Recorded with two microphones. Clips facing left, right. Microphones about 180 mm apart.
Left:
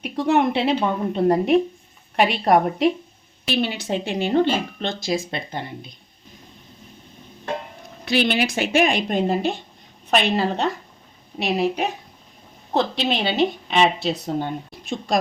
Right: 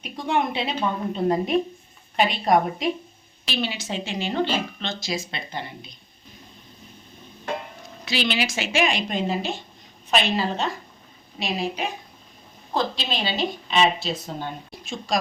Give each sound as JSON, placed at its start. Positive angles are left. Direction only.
{"t": 0.0, "sound": "a woman's voice", "side_deg": 70}
{"t": 3.4, "sound": "a woman's voice", "side_deg": 55}
{"t": 8.0, "sound": "speech", "side_deg": 55}
{"t": 13.0, "sound": "speech", "side_deg": 60}